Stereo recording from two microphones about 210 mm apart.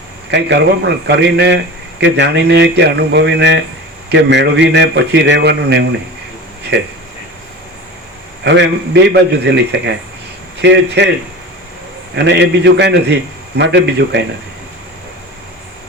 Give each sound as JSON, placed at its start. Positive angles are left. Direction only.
{"t": 0.3, "sound": "speech", "side_deg": -55}
{"t": 8.4, "sound": "a man's voice", "side_deg": -55}
{"t": 12.1, "sound": "a man's voice", "side_deg": -55}